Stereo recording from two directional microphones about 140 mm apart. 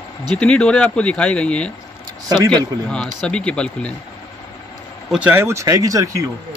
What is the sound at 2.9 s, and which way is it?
Speech, 5° left (ahead or behind).